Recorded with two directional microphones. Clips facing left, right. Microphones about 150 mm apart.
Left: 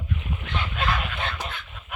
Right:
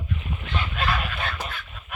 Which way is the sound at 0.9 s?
20° left (ahead or behind).